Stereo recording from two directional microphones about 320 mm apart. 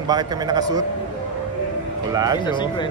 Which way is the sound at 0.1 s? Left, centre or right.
Centre.